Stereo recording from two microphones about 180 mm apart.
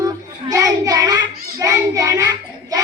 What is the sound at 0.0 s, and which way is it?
Child singing, 20° right (ahead or behind).